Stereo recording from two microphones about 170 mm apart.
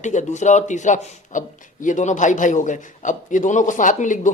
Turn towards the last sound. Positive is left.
turn(degrees=50)  # may be behind; listen again after turning